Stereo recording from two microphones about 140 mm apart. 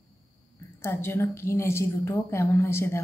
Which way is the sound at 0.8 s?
15° left (ahead or behind).